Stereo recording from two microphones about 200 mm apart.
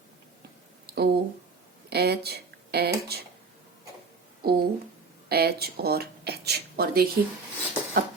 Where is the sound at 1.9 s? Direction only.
55° right (ahead or behind).